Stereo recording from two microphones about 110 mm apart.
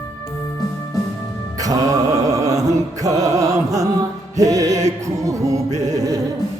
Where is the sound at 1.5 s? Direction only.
35° right (ahead or behind).